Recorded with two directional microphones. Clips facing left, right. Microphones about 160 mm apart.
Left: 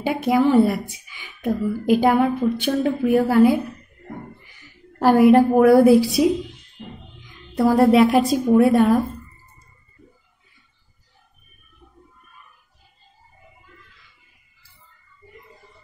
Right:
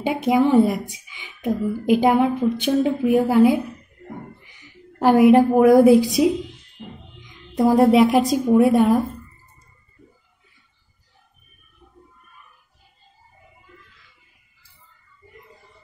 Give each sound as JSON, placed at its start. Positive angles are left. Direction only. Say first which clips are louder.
{"t": 0.0, "sound": "a woman's voice", "louder": "even", "side_deg": -15}
{"t": 7.2, "sound": "a woman's voice", "louder": "right 1 dB", "side_deg": -20}